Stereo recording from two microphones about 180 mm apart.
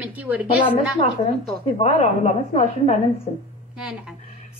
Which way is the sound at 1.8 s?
35° left (ahead or behind).